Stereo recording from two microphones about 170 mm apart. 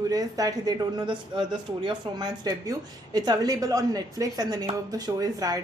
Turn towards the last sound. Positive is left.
turn(degrees=-20)  # may be behind; listen again after turning